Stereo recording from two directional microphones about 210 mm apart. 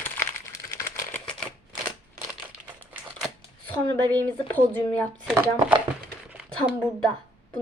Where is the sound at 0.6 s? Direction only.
15° left (ahead or behind).